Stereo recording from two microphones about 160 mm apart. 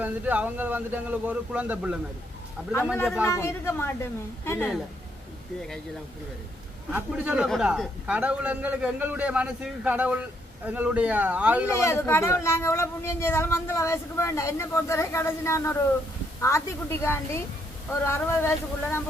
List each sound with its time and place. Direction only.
0.0 s a man's voice: 10° right (ahead or behind)
2.7 s speech: 15° left (ahead or behind)
6.9 s a man's voice: 10° right (ahead or behind)
11.7 s speech: 15° left (ahead or behind)